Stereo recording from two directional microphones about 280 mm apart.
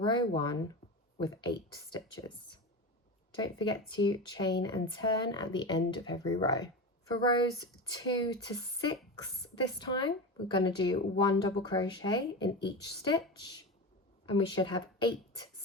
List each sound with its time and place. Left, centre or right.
0.0 s speech: centre
3.3 s speech: centre
7.9 s speech: centre